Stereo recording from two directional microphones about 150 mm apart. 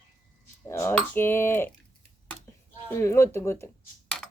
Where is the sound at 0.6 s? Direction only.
15° left (ahead or behind).